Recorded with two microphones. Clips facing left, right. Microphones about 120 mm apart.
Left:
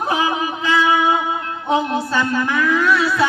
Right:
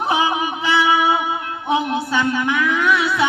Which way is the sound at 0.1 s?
15° right (ahead or behind).